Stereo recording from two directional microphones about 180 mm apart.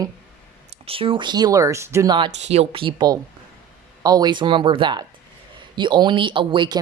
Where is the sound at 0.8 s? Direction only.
30° right (ahead or behind); by 2.1 s 15° right (ahead or behind).